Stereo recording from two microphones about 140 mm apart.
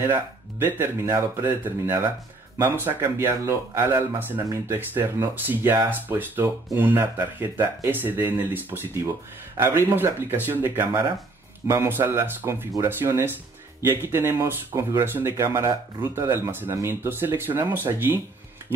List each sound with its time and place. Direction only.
0.1 s speech: 15° right (ahead or behind)